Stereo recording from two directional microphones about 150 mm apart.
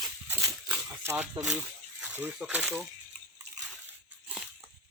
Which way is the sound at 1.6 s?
10° right (ahead or behind).